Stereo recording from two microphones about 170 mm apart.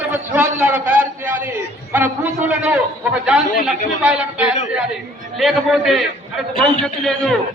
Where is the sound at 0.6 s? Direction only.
5° right (ahead or behind).